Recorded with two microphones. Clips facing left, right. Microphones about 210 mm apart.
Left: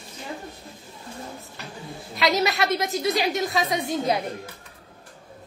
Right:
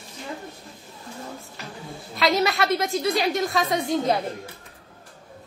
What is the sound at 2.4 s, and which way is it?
Speech, 20° left (ahead or behind).